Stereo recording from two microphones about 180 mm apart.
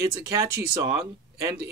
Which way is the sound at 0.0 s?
15° right (ahead or behind).